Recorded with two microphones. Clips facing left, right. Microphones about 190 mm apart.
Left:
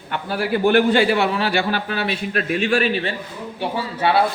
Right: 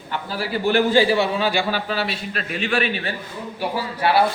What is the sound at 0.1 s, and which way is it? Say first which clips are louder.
A man's voice: left 4 dB; 60° left (ahead or behind).